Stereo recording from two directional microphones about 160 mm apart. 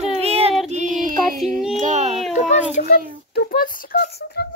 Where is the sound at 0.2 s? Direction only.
40° right (ahead or behind).